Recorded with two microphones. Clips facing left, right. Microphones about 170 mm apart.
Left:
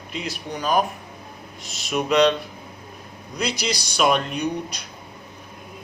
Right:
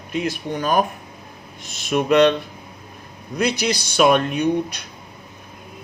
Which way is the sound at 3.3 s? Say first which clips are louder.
Right 5 dB; 55° right (ahead or behind).